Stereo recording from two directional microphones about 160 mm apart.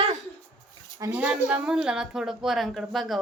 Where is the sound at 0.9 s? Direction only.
20° right (ahead or behind).